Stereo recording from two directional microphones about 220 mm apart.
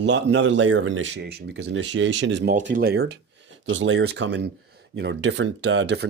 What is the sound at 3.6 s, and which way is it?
Speech, 60° right (ahead or behind).